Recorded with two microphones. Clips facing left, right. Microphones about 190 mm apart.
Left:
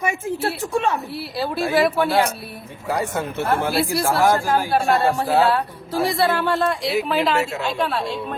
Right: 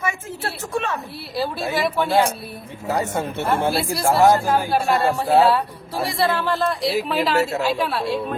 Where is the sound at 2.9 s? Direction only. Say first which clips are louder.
Even; 30° right (ahead or behind).